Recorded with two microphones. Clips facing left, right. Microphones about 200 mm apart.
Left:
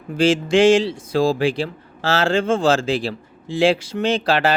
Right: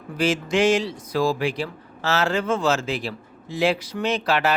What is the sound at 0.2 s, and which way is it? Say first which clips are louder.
Speech: left 6 dB; 30° left (ahead or behind).